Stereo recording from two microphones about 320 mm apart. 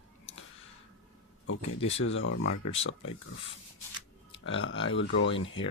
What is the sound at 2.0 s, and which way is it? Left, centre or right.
Speech, left.